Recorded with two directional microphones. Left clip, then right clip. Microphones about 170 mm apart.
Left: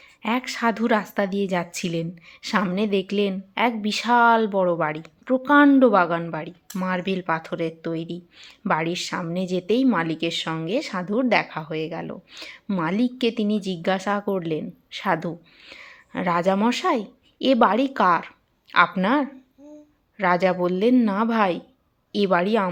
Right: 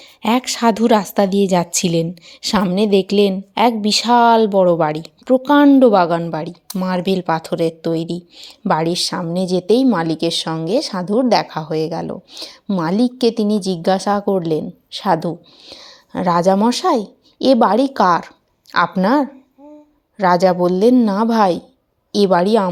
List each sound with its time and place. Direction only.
0.2 s a woman's voice: 45° right (ahead or behind)